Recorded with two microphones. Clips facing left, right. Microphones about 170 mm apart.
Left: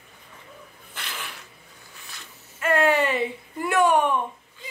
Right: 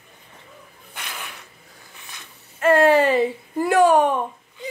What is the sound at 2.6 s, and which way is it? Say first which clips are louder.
Speech: right 6 dB; 35° right (ahead or behind).